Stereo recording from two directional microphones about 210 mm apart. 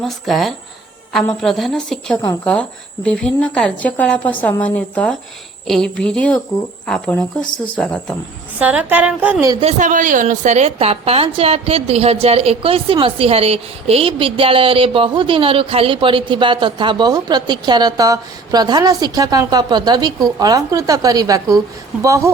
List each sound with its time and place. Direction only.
0.0 s speech: centre (ahead or behind)
8.5 s a woman's voice: 5° right (ahead or behind)
9.5 s a woman's voice: 30° right (ahead or behind)